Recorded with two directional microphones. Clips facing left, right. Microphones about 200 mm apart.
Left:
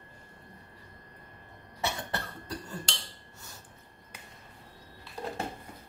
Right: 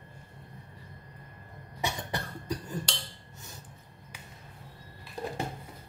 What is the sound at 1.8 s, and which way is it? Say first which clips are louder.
Cough: even; 15° right (ahead or behind).